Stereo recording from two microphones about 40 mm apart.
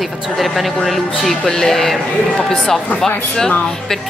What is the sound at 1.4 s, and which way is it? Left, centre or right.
Speech, centre.